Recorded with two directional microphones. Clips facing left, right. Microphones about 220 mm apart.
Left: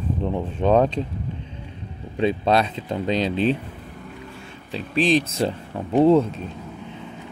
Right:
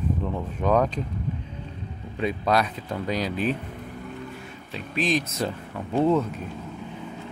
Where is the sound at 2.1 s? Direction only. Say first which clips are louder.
Left 4 dB; 30° left (ahead or behind).